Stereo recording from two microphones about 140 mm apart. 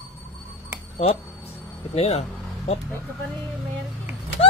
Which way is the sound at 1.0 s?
45° left (ahead or behind).